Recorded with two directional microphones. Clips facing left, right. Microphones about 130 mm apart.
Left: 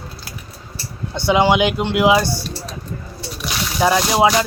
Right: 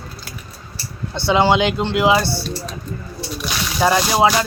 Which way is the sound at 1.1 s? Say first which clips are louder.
Even; 15° left (ahead or behind).